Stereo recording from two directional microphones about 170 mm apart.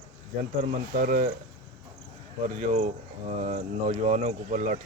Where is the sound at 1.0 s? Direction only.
55° right (ahead or behind).